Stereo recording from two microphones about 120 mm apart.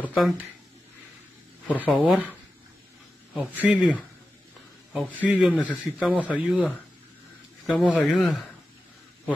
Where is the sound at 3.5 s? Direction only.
10° right (ahead or behind).